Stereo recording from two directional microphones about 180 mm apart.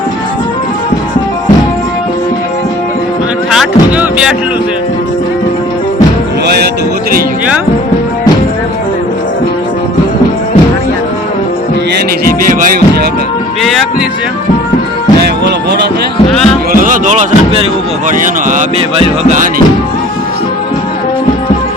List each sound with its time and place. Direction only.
3.5 s music: 5° right (ahead or behind)
12.4 s music: 50° right (ahead or behind)
13.6 s music: centre (ahead or behind)
15.2 s music: 70° right (ahead or behind)
16.7 s speech: 50° right (ahead or behind)
18.9 s music: 35° right (ahead or behind)